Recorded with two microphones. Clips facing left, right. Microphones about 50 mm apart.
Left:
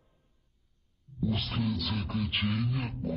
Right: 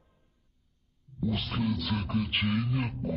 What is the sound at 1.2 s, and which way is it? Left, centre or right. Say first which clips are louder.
Music: right 1 dB; centre.